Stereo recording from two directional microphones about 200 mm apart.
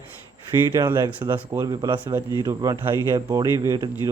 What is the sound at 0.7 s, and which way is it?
Speech, 15° right (ahead or behind).